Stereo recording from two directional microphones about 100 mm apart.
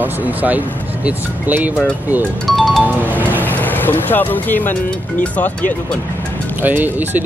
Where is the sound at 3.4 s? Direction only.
20° left (ahead or behind).